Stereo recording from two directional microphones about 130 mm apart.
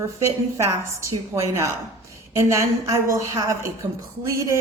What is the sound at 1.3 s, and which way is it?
A woman's voice, 25° right (ahead or behind).